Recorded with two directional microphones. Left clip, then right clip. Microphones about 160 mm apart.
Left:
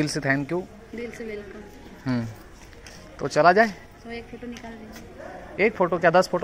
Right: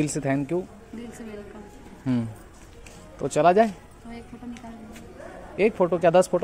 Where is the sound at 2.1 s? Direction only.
45° right (ahead or behind).